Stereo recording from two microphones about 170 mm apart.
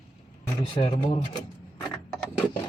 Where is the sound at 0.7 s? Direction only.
35° left (ahead or behind).